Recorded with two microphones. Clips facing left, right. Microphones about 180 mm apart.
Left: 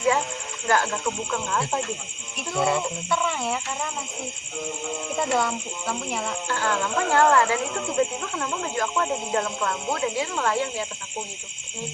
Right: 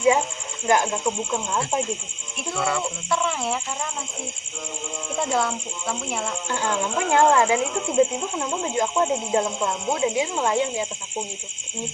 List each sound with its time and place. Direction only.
0.7 s speech: 15° right (ahead or behind)
2.6 s speech: 25° left (ahead or behind)
3.1 s speech: centre (ahead or behind)
5.1 s speech: centre (ahead or behind)
6.5 s speech: 15° right (ahead or behind)